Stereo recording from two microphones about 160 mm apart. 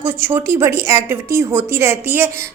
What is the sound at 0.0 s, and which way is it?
A woman's voice, 15° right (ahead or behind).